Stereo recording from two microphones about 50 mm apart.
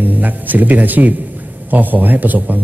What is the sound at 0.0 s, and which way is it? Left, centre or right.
A man's voice, right.